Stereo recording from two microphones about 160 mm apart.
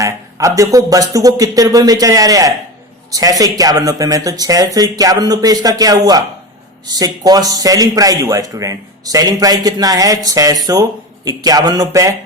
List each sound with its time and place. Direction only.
0.0 s speech: 20° right (ahead or behind)